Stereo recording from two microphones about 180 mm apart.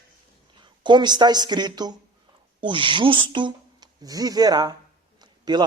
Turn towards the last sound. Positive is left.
turn(degrees=-20)  # may be behind; listen again after turning